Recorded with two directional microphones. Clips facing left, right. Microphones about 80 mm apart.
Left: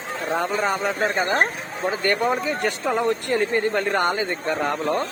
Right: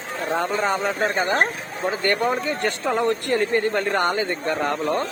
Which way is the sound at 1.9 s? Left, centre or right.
Centre.